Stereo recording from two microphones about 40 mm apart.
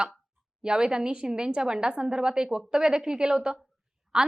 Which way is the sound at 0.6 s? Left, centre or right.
Right.